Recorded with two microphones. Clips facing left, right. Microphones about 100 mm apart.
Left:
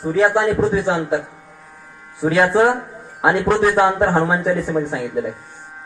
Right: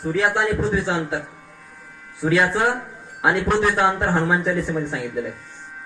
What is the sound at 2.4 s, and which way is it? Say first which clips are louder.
Speech: left 6 dB; 20° left (ahead or behind).